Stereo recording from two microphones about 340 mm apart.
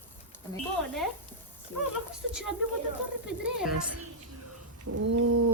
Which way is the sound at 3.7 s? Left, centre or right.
Right.